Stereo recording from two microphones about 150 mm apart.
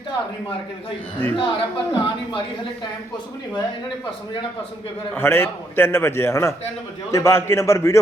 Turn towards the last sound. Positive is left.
turn(degrees=20)  # may be behind; listen again after turning